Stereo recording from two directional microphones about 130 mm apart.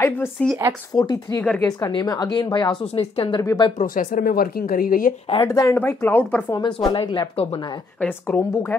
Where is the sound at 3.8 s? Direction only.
85° left.